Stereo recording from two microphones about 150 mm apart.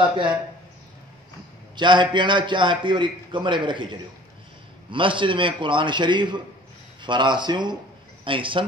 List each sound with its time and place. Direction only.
1.8 s a man's voice: 30° right (ahead or behind)